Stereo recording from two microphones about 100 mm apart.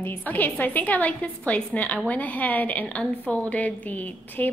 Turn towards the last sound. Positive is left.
turn(degrees=15)  # may be behind; listen again after turning